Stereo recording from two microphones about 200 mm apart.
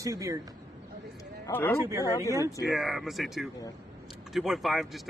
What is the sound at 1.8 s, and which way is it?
Speech, 15° right (ahead or behind).